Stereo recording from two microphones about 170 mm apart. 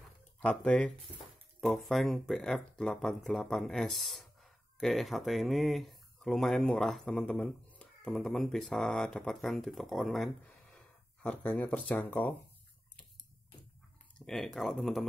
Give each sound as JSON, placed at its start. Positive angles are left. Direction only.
{"t": 0.4, "sound": "speech", "side_deg": 10}
{"t": 14.2, "sound": "speech", "side_deg": 0}